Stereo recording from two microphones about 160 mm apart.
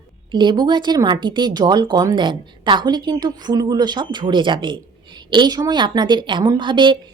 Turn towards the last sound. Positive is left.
turn(degrees=-30)  # may be behind; listen again after turning